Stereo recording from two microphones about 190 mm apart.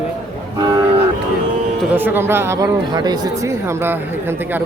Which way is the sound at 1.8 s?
10° right (ahead or behind).